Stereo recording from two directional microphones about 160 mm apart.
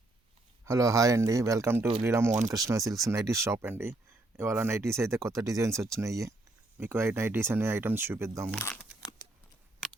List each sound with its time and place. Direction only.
0.6 s speech: 20° right (ahead or behind)
8.4 s speech: 5° left (ahead or behind)
8.9 s a sound: 5° right (ahead or behind)